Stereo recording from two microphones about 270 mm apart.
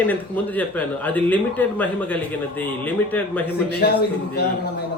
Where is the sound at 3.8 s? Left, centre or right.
Left.